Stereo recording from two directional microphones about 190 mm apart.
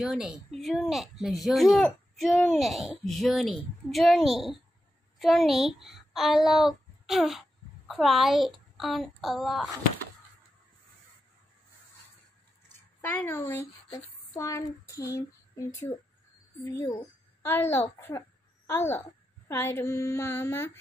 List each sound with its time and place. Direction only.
0.0 s a child's voice: 5° right (ahead or behind)
13.0 s a woman's voice: 10° left (ahead or behind)
17.4 s a woman's voice: 10° left (ahead or behind)